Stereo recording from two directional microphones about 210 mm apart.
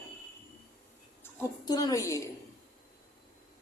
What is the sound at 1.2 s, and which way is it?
A woman's voice, 20° left (ahead or behind).